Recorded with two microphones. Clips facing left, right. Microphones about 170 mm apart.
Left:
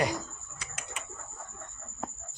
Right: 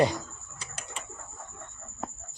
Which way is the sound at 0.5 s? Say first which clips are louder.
Right 1 dB; 30° right (ahead or behind).